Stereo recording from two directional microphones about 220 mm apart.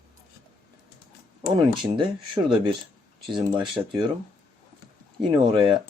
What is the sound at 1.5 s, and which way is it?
Speech, 20° right (ahead or behind).